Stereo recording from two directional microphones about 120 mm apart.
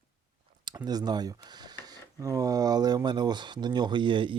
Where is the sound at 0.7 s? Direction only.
35° right (ahead or behind).